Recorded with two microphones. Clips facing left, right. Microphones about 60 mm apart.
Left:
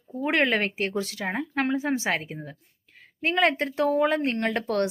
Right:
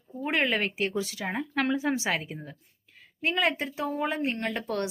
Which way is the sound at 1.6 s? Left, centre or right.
Left.